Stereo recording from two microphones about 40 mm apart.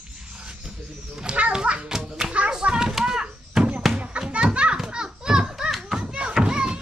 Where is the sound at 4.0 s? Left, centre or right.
Right; by 6.0 s centre.